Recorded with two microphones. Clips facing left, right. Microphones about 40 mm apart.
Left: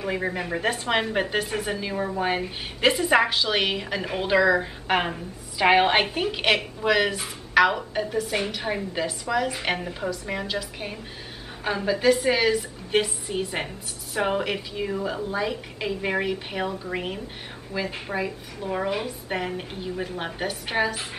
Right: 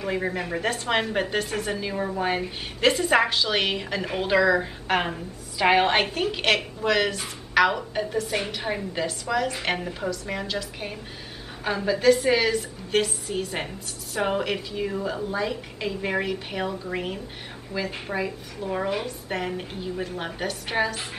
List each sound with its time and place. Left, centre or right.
0.0 s a woman's voice: centre